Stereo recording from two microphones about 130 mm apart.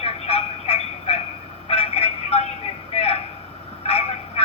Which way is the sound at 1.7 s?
50° left (ahead or behind).